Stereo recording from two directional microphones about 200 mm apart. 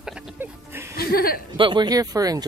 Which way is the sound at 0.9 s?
50° left (ahead or behind).